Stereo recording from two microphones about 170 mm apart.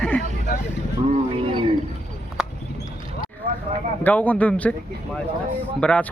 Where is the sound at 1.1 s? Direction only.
35° right (ahead or behind).